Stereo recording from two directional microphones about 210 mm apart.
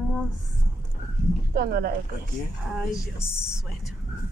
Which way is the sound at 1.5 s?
45° right (ahead or behind).